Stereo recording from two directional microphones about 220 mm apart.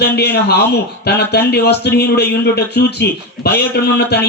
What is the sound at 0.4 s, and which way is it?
A man's voice, 45° left (ahead or behind).